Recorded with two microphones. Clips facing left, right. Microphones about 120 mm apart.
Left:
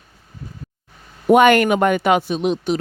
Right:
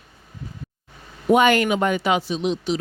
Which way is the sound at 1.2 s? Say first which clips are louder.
Left 4 dB; 60° left (ahead or behind).